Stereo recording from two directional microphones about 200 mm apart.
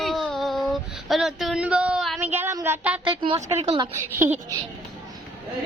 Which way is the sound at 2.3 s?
10° right (ahead or behind).